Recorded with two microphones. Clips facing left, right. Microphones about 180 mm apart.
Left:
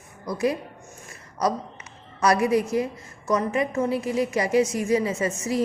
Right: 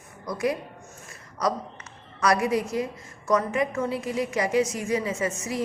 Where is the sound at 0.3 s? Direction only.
30° left (ahead or behind).